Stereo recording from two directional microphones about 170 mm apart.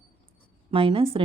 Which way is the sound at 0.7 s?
35° right (ahead or behind).